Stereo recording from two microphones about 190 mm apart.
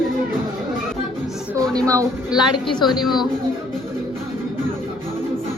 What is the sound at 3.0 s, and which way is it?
Speech, centre (ahead or behind).